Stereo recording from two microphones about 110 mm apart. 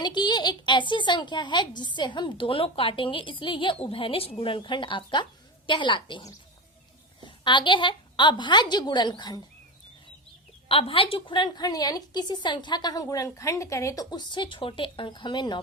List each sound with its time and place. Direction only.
0.0 s speech: 40° left (ahead or behind)
10.7 s a woman's voice: 55° left (ahead or behind)